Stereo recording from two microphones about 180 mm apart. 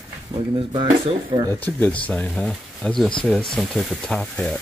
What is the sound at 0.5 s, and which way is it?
Speech, 25° right (ahead or behind).